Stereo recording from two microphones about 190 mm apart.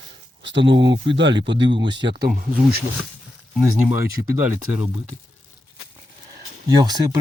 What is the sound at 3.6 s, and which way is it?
Speech, 15° right (ahead or behind).